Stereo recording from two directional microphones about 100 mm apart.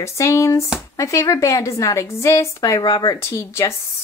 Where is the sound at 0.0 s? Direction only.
30° left (ahead or behind).